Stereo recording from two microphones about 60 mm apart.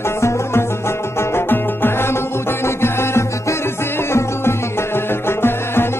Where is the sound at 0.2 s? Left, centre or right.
Left.